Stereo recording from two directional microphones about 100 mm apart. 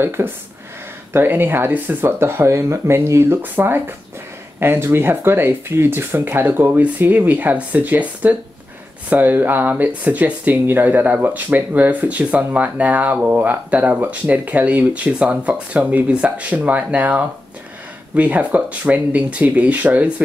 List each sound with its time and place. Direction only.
0.0 s speech: 20° right (ahead or behind)